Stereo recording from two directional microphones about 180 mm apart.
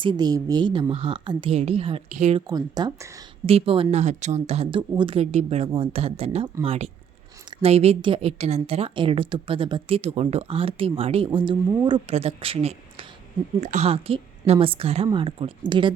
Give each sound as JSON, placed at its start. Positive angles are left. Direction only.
{"t": 0.0, "sound": "a woman's voice", "side_deg": -25}
{"t": 2.5, "sound": "a woman's voice", "side_deg": -20}
{"t": 3.4, "sound": "a woman's voice", "side_deg": -30}